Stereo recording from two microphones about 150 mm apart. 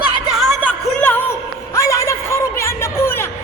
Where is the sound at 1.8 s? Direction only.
20° left (ahead or behind).